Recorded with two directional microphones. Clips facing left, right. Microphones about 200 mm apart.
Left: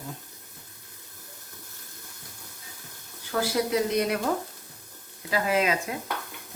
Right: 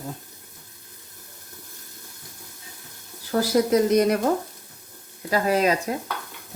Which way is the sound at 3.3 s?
40° right (ahead or behind).